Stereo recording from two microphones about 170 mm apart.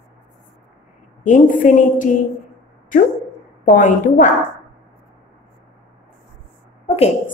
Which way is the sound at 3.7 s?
45° left (ahead or behind).